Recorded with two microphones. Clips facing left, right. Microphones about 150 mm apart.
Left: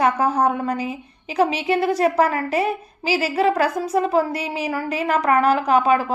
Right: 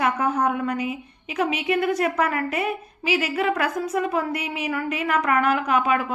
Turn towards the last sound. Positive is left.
turn(degrees=35)  # may be behind; listen again after turning